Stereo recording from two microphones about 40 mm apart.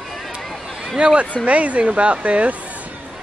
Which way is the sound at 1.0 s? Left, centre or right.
Right.